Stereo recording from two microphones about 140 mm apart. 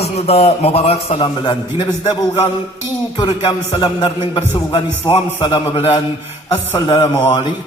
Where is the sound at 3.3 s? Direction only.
40° left (ahead or behind).